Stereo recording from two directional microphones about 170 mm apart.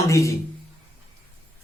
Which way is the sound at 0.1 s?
20° left (ahead or behind).